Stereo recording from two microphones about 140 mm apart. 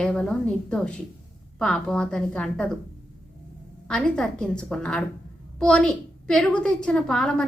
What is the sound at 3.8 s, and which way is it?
A woman's voice, 5° left (ahead or behind).